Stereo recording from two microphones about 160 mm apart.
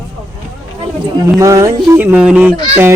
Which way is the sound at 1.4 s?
20° right (ahead or behind).